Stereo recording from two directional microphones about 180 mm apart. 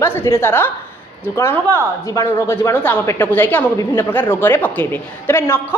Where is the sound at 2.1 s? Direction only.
15° left (ahead or behind).